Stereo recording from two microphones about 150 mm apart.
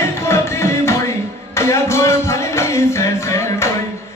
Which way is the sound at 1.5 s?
20° left (ahead or behind).